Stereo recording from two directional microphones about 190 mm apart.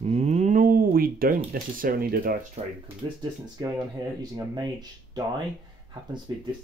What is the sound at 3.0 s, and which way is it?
Speech, 25° right (ahead or behind).